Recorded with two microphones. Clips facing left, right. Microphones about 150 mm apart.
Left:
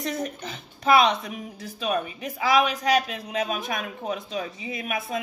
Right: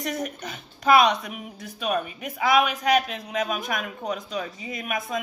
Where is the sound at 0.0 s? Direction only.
25° left (ahead or behind).